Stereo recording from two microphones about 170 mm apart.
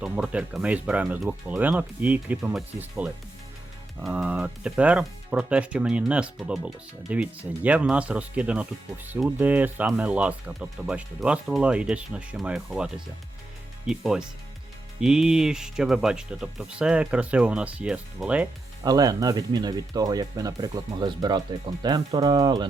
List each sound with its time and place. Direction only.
0.0 s speech: 5° right (ahead or behind)
18.8 s speech: 20° right (ahead or behind)